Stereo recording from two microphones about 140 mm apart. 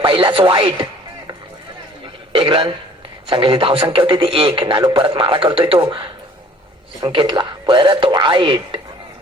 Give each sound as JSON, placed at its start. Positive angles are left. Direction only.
{"t": 0.0, "sound": "a man's voice", "side_deg": -40}
{"t": 2.3, "sound": "a man's voice", "side_deg": -35}